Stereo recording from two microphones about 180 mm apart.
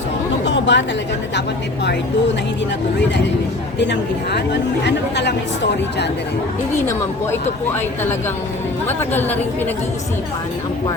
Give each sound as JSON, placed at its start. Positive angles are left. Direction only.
{"t": 0.4, "sound": "speech", "side_deg": 80}
{"t": 3.8, "sound": "speech", "side_deg": 70}
{"t": 8.9, "sound": "a woman's voice", "side_deg": 10}